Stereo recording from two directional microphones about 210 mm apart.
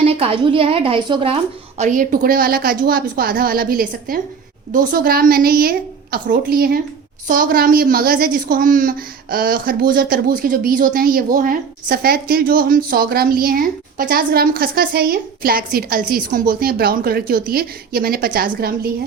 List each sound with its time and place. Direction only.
0.0 s a woman's voice: 25° right (ahead or behind)
1.8 s a woman's voice: 40° right (ahead or behind)